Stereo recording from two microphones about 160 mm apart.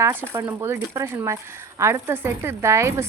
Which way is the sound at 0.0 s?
15° right (ahead or behind).